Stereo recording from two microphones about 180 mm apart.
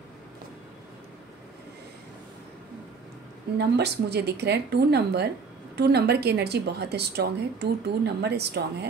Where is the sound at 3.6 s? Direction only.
65° right (ahead or behind).